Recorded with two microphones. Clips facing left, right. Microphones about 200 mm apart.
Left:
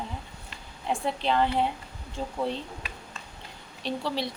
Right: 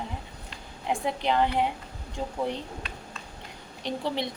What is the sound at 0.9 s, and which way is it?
A woman's voice, 15° right (ahead or behind).